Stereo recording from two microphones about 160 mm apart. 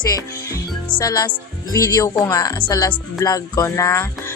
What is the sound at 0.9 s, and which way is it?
Music, 25° left (ahead or behind).